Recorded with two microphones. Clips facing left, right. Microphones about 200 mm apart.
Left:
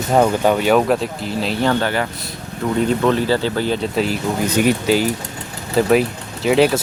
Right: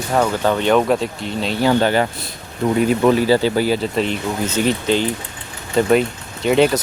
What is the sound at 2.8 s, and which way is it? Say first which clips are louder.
Speech: right 2 dB; 10° right (ahead or behind).